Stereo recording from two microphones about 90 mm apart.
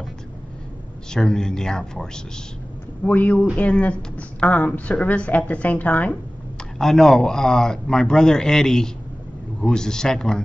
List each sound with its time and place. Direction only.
1.1 s a man's voice: 5° left (ahead or behind)
6.8 s speech: centre (ahead or behind)